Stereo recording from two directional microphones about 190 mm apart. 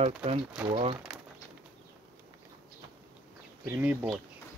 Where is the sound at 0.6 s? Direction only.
Centre (ahead or behind).